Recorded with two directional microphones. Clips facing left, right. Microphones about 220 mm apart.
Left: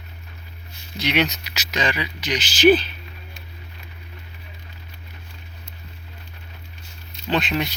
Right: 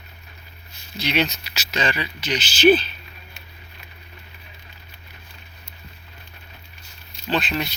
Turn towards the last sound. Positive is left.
turn(degrees=20)  # may be behind; listen again after turning